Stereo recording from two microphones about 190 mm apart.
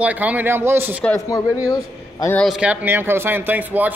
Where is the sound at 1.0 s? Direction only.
15° left (ahead or behind).